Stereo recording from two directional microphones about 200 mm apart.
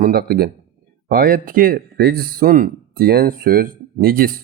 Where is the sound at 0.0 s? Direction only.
50° right (ahead or behind).